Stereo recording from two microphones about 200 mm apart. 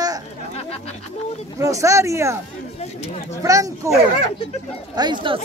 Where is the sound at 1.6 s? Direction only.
15° right (ahead or behind).